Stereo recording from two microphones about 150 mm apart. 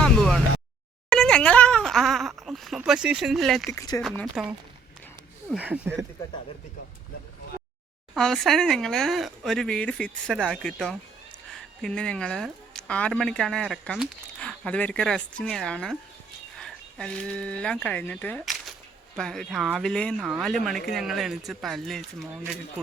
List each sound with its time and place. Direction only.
0.0 s a sound: 5° left (ahead or behind)
1.1 s speech: 5° left (ahead or behind)
3.7 s speech: 20° left (ahead or behind)
4.4 s speech: 5° right (ahead or behind)
8.1 s speech: 5° left (ahead or behind)